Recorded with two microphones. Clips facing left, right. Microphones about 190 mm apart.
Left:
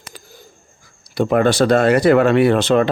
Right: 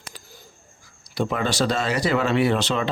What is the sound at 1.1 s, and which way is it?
Speech, 55° left (ahead or behind).